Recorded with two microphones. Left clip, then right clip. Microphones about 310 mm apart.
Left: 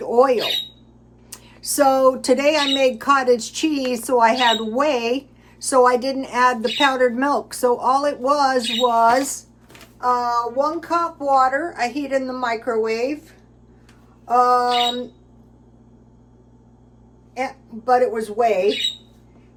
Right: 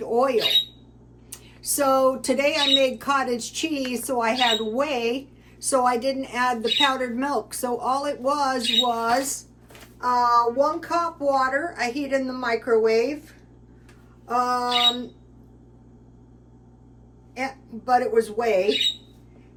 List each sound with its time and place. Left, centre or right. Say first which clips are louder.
0.0 s speech: left 5 dB; left
17.3 s speech: left 4 dB; centre